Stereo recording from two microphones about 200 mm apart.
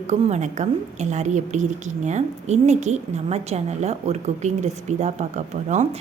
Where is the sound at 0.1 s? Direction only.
35° right (ahead or behind).